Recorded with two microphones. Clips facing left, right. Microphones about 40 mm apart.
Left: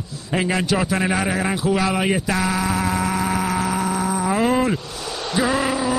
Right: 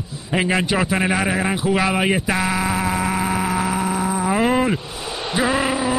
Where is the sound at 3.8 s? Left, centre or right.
Centre.